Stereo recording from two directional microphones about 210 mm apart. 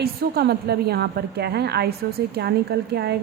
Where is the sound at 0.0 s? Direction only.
50° right (ahead or behind).